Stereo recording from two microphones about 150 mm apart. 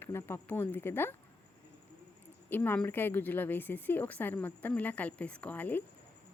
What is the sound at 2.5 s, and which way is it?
A woman's voice, 10° left (ahead or behind).